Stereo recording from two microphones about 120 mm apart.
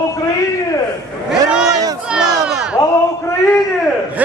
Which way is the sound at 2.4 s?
5° right (ahead or behind).